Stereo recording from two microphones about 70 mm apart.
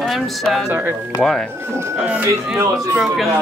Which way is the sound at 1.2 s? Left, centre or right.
Centre.